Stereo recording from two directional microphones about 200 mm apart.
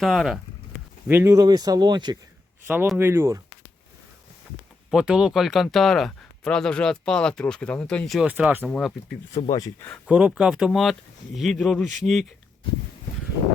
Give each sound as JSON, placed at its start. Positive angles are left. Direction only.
{"t": 0.0, "sound": "speech", "side_deg": 0}
{"t": 1.0, "sound": "speech", "side_deg": -10}
{"t": 2.6, "sound": "speech", "side_deg": -10}
{"t": 4.9, "sound": "speech", "side_deg": -5}
{"t": 8.6, "sound": "speech", "side_deg": 5}
{"t": 9.3, "sound": "speech", "side_deg": 20}
{"t": 10.1, "sound": "speech", "side_deg": -5}